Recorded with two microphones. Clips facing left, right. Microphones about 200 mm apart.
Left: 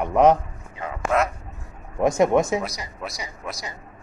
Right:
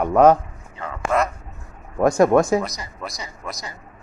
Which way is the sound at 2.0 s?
20° left (ahead or behind).